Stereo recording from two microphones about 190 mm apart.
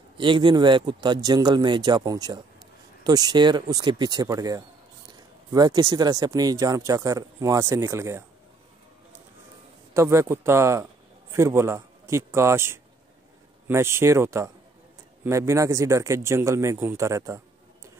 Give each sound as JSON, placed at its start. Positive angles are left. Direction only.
{"t": 0.2, "sound": "speech", "side_deg": -25}
{"t": 9.9, "sound": "a man's voice", "side_deg": -15}